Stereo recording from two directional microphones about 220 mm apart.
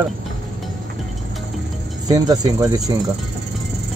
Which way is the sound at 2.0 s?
15° right (ahead or behind).